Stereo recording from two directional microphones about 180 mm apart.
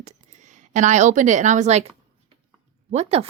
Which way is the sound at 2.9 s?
35° right (ahead or behind).